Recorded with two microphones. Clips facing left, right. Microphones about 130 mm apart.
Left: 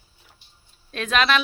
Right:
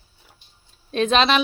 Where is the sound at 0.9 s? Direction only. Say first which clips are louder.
Right 4 dB; 25° right (ahead or behind).